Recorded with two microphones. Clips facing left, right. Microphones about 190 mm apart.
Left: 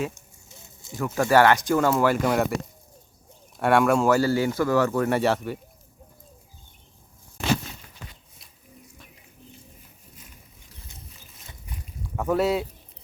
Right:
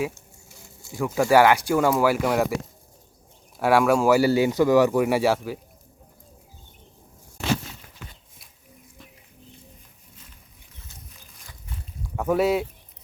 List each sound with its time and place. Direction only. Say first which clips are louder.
0.1 s a sound: right 1 dB; 20° left (ahead or behind)
0.9 s speech: right 2 dB; 10° right (ahead or behind)
3.6 s speech: right 1 dB; 5° right (ahead or behind)
12.1 s speech: right 2 dB; centre (ahead or behind)